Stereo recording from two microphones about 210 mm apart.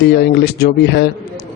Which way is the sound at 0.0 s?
50° left (ahead or behind).